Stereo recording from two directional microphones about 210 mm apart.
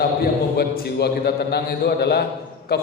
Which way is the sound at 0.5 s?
45° left (ahead or behind).